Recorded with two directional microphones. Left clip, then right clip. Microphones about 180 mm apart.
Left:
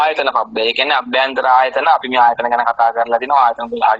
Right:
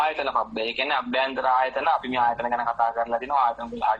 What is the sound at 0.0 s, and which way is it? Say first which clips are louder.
A man's voice: left 9 dB; 45° left (ahead or behind).